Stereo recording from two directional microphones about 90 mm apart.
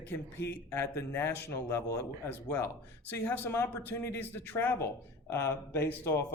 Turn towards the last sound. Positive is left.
turn(degrees=30)  # may be behind; listen again after turning